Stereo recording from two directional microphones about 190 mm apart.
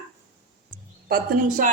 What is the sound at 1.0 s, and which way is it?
Speech, 50° right (ahead or behind).